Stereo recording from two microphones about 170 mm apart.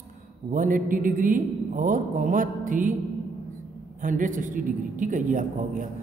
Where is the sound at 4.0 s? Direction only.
50° right (ahead or behind).